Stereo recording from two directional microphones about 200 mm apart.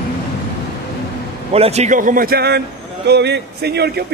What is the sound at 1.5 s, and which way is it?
A man's voice, 30° right (ahead or behind).